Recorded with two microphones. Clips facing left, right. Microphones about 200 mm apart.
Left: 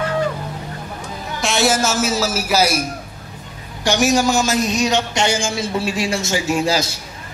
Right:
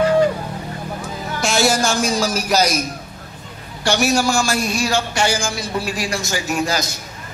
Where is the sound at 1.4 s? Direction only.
Centre (ahead or behind); by 7.0 s 25° left (ahead or behind).